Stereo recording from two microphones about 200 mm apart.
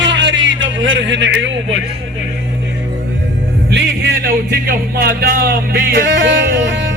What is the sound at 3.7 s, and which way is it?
A man's voice, 60° right (ahead or behind).